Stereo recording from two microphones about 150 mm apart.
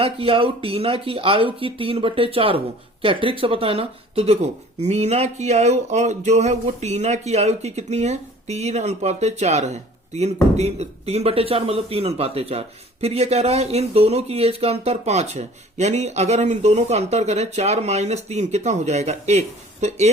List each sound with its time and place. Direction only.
0.0 s a man's voice: 40° right (ahead or behind)